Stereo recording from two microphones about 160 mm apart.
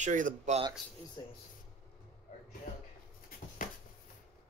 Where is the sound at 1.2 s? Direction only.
30° left (ahead or behind).